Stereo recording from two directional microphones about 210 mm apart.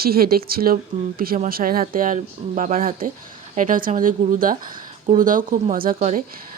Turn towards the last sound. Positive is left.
turn(degrees=-40)  # may be behind; listen again after turning